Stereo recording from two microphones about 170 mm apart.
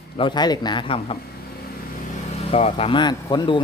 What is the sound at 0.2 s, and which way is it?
Speech, 25° left (ahead or behind).